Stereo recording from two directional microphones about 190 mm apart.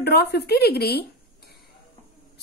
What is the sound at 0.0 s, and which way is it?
A woman's voice, 55° left (ahead or behind).